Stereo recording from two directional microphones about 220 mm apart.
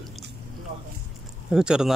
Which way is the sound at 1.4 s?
5° right (ahead or behind).